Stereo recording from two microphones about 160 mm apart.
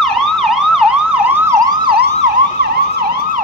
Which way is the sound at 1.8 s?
85° right.